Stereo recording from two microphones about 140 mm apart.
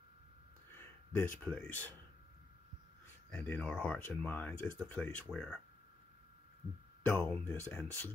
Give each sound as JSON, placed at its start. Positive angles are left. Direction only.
{"t": 0.7, "sound": "a sound", "side_deg": 15}
{"t": 1.4, "sound": "speech", "side_deg": 10}
{"t": 3.3, "sound": "speech", "side_deg": 10}
{"t": 7.0, "sound": "speech", "side_deg": 15}